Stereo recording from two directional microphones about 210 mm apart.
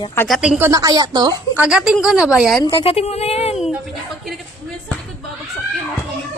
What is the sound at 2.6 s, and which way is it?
Speech, 30° left (ahead or behind).